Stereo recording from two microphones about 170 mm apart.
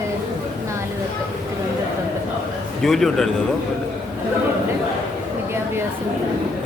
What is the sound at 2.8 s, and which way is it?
Speech, centre (ahead or behind).